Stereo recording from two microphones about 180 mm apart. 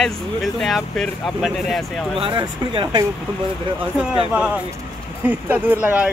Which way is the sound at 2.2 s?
25° right (ahead or behind).